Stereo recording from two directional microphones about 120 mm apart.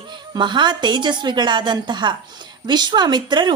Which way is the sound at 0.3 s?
40° right (ahead or behind).